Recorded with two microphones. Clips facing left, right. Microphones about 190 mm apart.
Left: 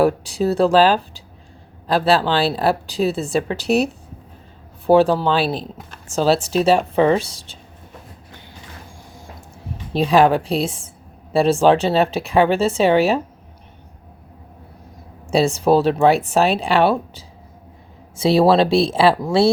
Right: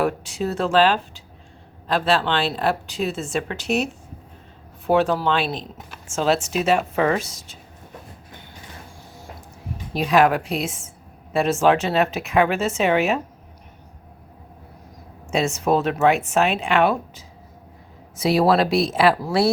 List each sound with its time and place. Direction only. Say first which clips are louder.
0.0 s speech: left 6 dB; 35° left (ahead or behind)
4.9 s speech: left 5 dB; 30° left (ahead or behind)
9.9 s speech: left 3 dB; 30° left (ahead or behind)
15.3 s speech: left 5 dB; 35° left (ahead or behind)